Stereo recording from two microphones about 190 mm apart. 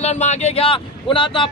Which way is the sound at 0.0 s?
35° left (ahead or behind).